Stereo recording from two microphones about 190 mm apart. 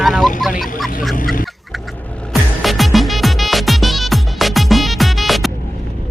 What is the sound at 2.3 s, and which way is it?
Music, centre (ahead or behind).